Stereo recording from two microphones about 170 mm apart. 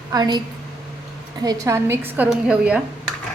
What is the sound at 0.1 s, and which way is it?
Speech, 25° right (ahead or behind).